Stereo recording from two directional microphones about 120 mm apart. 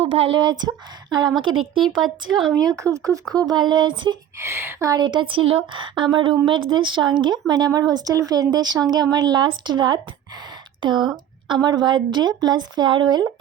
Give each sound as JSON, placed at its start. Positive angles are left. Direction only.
{"t": 0.0, "sound": "a woman's voice", "side_deg": -50}
{"t": 2.0, "sound": "speech", "side_deg": 0}
{"t": 2.6, "sound": "speech", "side_deg": -30}
{"t": 3.4, "sound": "a woman's voice", "side_deg": -35}
{"t": 4.4, "sound": "a woman's voice", "side_deg": -20}